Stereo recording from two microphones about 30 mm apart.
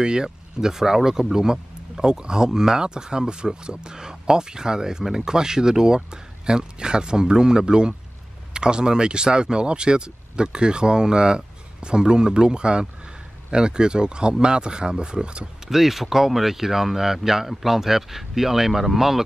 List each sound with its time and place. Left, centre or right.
0.0 s speech: right
15.7 s speech: centre